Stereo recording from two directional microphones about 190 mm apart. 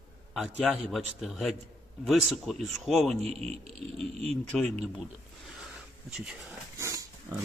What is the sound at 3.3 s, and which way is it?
Speech, 35° right (ahead or behind).